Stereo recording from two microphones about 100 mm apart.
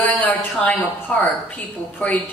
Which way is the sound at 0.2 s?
15° left (ahead or behind).